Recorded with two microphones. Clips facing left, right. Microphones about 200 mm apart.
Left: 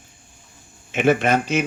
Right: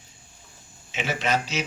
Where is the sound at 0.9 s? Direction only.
55° left (ahead or behind).